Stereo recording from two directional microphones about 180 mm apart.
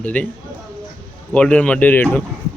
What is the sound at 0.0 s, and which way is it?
Speech, 10° left (ahead or behind).